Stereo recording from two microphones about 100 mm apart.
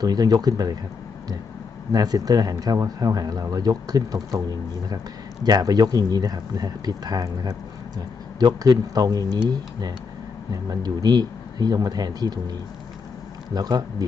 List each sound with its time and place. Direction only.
0.0 s speech: 40° right (ahead or behind)
1.9 s speech: 40° right (ahead or behind)